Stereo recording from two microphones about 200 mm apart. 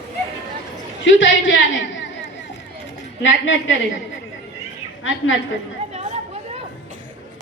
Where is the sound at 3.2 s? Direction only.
70° left (ahead or behind).